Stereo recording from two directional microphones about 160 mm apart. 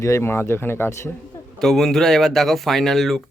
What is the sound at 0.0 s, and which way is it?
Speech, 15° left (ahead or behind).